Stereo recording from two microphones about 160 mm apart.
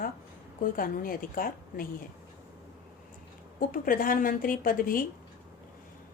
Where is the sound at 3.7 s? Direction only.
60° left (ahead or behind).